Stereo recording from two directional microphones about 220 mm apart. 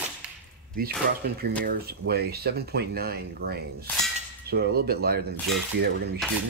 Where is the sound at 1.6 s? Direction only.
45° right (ahead or behind).